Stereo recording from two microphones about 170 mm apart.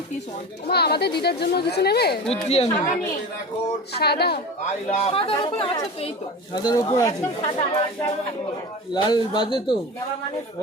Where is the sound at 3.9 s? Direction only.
70° left (ahead or behind).